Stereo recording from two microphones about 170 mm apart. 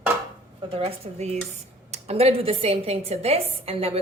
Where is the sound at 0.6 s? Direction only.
35° right (ahead or behind).